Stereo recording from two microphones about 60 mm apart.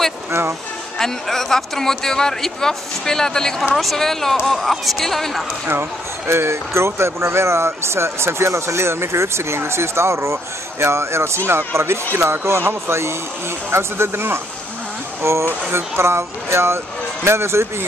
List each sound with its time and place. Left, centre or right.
0.3 s speech: right
0.9 s speech: centre
5.7 s speech: right